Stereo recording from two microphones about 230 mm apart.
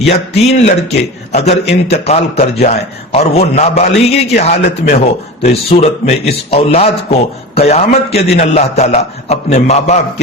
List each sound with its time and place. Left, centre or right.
0.1 s a man's voice: left